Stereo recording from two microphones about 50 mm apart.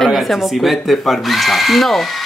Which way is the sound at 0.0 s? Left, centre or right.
Centre.